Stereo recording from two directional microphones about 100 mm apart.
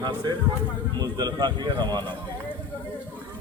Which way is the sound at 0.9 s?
45° right (ahead or behind).